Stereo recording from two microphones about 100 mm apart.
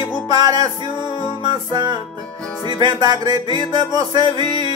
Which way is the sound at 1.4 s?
45° right (ahead or behind).